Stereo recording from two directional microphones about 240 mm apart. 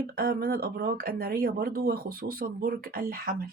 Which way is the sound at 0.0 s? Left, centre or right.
Right.